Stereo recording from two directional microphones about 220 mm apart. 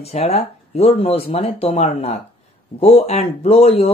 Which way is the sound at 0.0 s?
30° left (ahead or behind).